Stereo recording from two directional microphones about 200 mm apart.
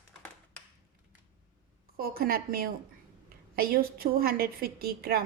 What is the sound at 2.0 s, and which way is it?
A woman's voice, 45° right (ahead or behind).